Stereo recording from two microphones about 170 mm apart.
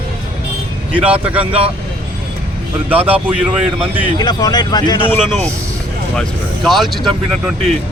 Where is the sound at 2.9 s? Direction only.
10° right (ahead or behind).